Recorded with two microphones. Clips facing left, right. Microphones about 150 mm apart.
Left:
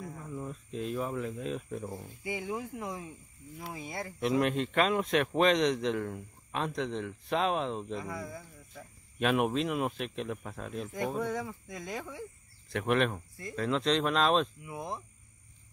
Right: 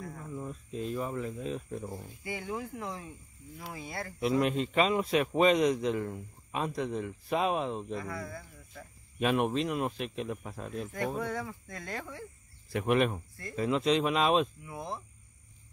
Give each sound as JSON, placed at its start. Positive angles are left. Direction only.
{"t": 0.2, "sound": "speech", "side_deg": 0}
{"t": 2.2, "sound": "speech", "side_deg": 15}
{"t": 4.2, "sound": "a man's voice", "side_deg": 0}
{"t": 8.0, "sound": "speech", "side_deg": 15}
{"t": 9.2, "sound": "a man's voice", "side_deg": 0}
{"t": 11.2, "sound": "speech", "side_deg": 15}
{"t": 12.6, "sound": "a man's voice", "side_deg": -5}
{"t": 14.7, "sound": "speech", "side_deg": 15}